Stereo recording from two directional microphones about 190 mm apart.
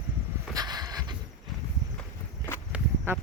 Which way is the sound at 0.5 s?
20° right (ahead or behind).